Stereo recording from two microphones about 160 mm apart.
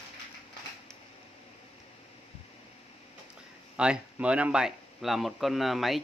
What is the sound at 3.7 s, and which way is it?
Speech, 5° right (ahead or behind).